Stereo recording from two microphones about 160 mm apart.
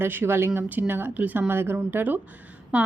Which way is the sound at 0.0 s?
15° right (ahead or behind).